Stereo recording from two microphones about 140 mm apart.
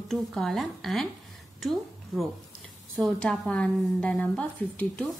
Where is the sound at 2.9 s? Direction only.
5° left (ahead or behind).